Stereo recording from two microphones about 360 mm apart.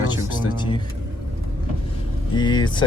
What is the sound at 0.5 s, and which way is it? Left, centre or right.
Vehicle, centre.